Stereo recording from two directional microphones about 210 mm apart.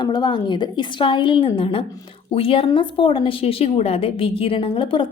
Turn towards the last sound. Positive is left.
turn(degrees=25)  # may be behind; listen again after turning